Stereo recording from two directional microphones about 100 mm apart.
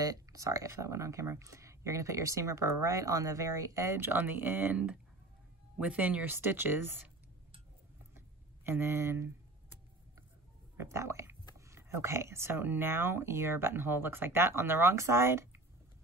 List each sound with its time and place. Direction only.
0.0 s speech: 35° right (ahead or behind); by 4.7 s 20° right (ahead or behind)
5.8 s speech: 15° right (ahead or behind)
8.6 s speech: 25° right (ahead or behind)
10.8 s speech: 25° right (ahead or behind)